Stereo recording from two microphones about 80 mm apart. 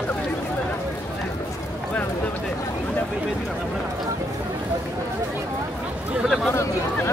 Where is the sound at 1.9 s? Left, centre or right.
Left.